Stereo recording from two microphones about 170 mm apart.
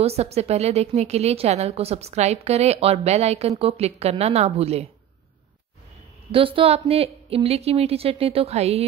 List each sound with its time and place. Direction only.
0.0 s a woman's voice: 40° right (ahead or behind)
6.3 s a woman's voice: 30° right (ahead or behind)